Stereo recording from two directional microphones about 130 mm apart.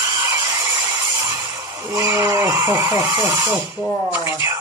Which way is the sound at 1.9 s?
20° right (ahead or behind).